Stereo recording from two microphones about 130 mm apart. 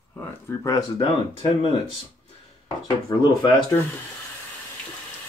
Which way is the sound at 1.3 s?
45° left (ahead or behind).